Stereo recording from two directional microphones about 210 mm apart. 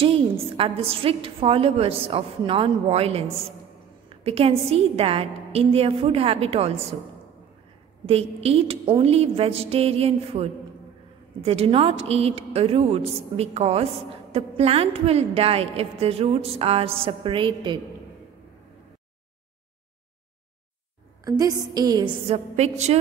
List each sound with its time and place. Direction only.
0.0 s a woman's voice: 25° right (ahead or behind)
8.1 s a woman's voice: 30° right (ahead or behind)
21.2 s a sound: 15° right (ahead or behind)
21.7 s a woman's voice: 20° right (ahead or behind)